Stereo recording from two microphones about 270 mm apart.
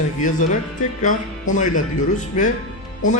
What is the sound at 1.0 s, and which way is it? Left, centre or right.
Speech, left.